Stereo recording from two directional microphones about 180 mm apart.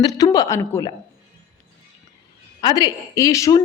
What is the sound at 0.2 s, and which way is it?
Speech, 20° left (ahead or behind).